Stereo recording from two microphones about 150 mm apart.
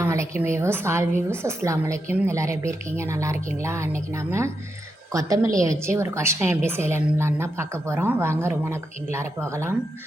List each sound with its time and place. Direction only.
0.0 s a woman's voice: 20° right (ahead or behind)